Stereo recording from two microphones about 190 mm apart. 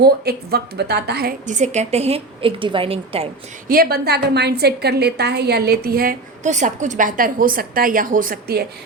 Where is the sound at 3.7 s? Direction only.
50° right (ahead or behind).